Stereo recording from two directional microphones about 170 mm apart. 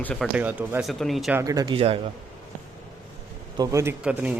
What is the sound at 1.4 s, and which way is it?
Speech, 20° right (ahead or behind).